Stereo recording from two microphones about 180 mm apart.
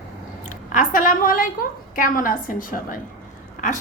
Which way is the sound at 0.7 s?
50° left (ahead or behind).